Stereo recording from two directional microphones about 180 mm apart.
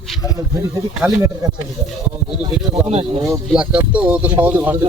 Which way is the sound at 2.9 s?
35° right (ahead or behind).